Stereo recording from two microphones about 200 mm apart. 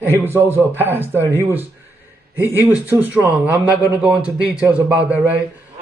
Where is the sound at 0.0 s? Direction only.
10° right (ahead or behind).